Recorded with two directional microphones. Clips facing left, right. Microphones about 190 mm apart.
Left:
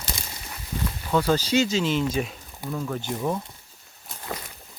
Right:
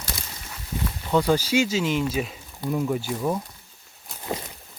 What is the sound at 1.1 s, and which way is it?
Speech, 15° right (ahead or behind).